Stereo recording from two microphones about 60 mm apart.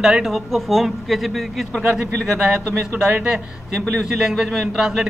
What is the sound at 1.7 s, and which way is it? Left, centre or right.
Speech, right.